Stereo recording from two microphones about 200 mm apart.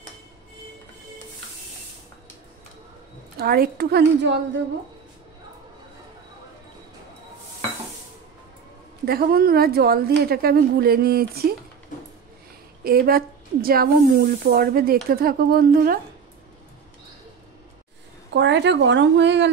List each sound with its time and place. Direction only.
3.3 s speech: 50° right (ahead or behind)
9.0 s speech: 50° right (ahead or behind)
12.8 s speech: 50° right (ahead or behind)
18.3 s speech: 65° right (ahead or behind)